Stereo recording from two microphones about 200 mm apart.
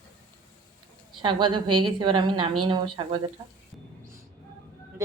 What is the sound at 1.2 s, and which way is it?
A woman's voice, 25° right (ahead or behind).